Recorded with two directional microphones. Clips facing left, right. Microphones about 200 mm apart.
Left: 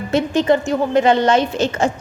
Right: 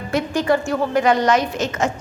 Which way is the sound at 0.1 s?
25° left (ahead or behind).